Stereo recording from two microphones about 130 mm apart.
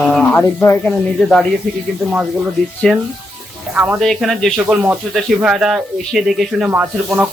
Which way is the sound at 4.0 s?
Centre (ahead or behind).